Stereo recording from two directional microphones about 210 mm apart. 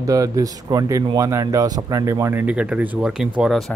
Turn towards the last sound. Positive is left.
turn(degrees=0)  # may be behind; listen again after turning